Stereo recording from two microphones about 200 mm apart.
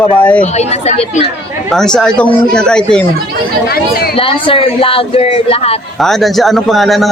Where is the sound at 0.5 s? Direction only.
35° left (ahead or behind).